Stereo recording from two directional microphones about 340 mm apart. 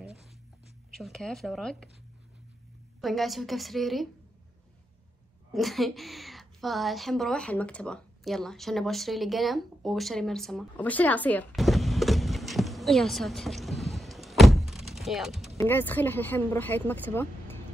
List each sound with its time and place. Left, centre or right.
0.0 s writing: centre
0.9 s a woman's voice: centre
3.0 s a woman's voice: centre
5.5 s a woman's voice: centre